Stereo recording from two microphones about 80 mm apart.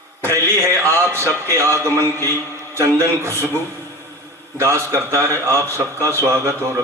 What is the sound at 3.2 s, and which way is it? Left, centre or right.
Speech, right.